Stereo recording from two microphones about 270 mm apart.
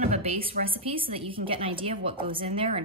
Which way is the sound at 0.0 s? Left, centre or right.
Right.